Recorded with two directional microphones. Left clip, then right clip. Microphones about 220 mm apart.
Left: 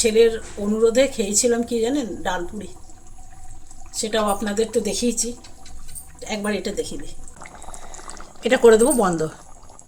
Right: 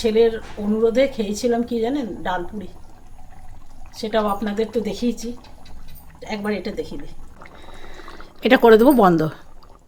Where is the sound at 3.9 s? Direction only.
10° left (ahead or behind).